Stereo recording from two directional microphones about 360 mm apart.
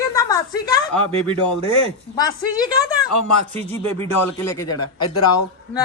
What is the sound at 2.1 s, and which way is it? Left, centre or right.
A woman's voice, centre.